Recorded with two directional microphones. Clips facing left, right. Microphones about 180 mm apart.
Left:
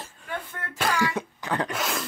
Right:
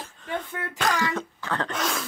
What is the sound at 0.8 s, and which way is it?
Throat clearing, 10° left (ahead or behind).